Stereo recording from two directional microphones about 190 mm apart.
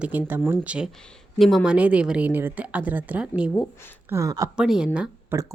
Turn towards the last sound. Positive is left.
turn(degrees=-5)  # may be behind; listen again after turning